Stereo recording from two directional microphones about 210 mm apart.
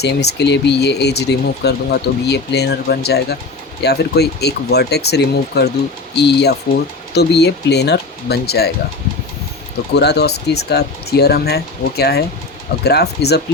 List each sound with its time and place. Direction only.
0.0 s speech: 50° left (ahead or behind)
9.9 s speech: 50° left (ahead or behind)